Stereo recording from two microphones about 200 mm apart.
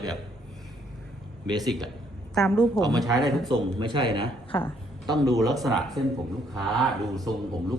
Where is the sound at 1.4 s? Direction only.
20° right (ahead or behind).